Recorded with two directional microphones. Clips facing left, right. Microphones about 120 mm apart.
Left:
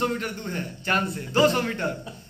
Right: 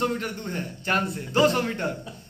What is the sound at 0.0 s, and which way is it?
A man's voice, 20° right (ahead or behind).